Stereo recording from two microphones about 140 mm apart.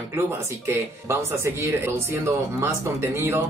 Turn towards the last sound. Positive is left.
turn(degrees=-20)  # may be behind; listen again after turning